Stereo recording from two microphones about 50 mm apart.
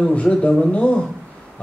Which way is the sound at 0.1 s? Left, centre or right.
Left.